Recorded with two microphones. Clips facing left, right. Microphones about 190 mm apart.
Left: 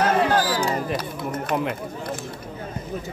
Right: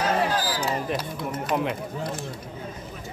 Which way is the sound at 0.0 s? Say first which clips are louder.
Left 4 dB; 60° left (ahead or behind).